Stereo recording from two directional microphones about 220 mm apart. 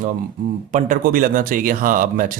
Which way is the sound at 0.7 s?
35° right (ahead or behind).